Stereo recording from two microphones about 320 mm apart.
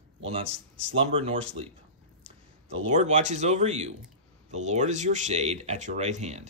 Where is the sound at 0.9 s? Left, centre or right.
Centre.